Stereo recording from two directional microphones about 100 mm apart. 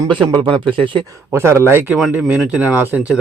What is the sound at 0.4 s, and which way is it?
Speech, 60° right (ahead or behind).